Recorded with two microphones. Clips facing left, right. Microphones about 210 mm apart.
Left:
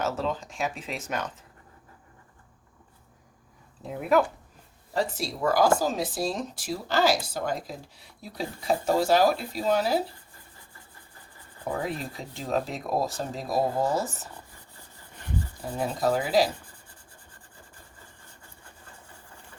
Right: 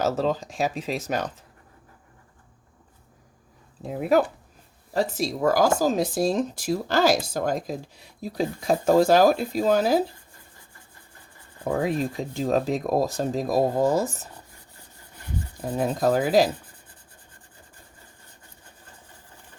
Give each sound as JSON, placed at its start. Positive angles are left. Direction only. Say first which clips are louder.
{"t": 0.0, "sound": "speech", "louder": "right 5 dB", "side_deg": -40}
{"t": 3.9, "sound": "speech", "louder": "right 2 dB", "side_deg": -35}
{"t": 11.6, "sound": "rub", "louder": "right 6 dB", "side_deg": -70}
{"t": 11.9, "sound": "speech", "louder": "right 8 dB", "side_deg": -45}
{"t": 15.8, "sound": "speech", "louder": "right 4 dB", "side_deg": -55}